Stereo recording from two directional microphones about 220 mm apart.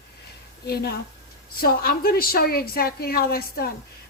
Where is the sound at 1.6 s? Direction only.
45° left (ahead or behind).